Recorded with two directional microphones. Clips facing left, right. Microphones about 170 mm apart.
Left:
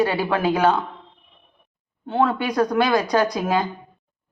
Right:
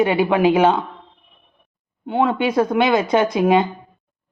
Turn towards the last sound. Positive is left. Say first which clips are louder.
# right 5 dB
turn(degrees=-25)  # may be behind; listen again after turning